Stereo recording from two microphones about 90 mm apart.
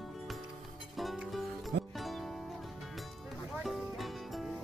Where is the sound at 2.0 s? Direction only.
Centre (ahead or behind).